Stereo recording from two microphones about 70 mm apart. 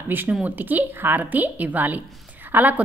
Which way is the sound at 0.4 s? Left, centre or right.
Right.